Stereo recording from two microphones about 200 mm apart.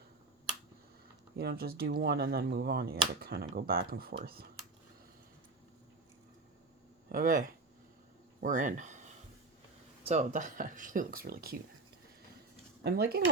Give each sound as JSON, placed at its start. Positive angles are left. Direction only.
{"t": 1.4, "sound": "speech", "side_deg": -50}
{"t": 7.1, "sound": "speech", "side_deg": -45}
{"t": 10.0, "sound": "speech", "side_deg": -35}
{"t": 12.8, "sound": "speech", "side_deg": -50}